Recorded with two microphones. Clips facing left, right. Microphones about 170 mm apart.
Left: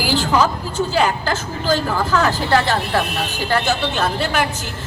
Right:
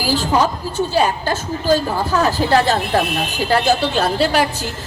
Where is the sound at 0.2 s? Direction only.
25° right (ahead or behind).